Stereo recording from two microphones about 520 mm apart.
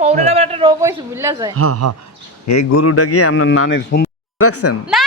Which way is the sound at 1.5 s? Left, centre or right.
Right.